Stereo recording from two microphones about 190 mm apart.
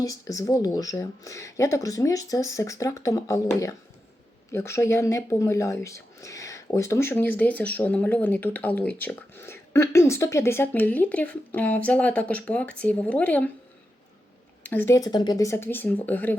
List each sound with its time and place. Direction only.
0.0 s speech: 20° left (ahead or behind)
14.6 s speech: 10° left (ahead or behind)